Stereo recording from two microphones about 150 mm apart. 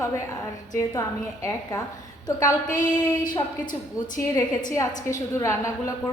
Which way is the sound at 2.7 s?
60° left (ahead or behind).